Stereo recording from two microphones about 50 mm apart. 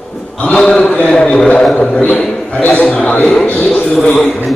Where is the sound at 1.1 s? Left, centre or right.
Centre.